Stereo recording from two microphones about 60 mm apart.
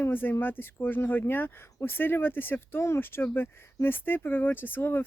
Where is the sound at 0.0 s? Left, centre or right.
Left.